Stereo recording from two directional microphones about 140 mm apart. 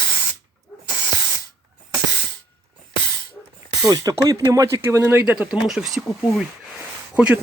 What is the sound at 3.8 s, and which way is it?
Speech, 25° right (ahead or behind).